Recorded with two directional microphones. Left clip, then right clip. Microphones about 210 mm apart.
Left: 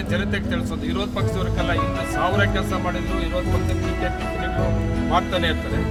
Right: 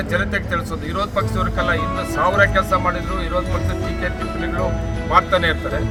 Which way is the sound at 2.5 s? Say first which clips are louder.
Right 7 dB; 5° right (ahead or behind).